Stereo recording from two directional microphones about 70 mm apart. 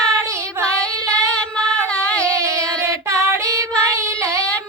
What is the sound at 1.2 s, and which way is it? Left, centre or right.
Female singing, centre.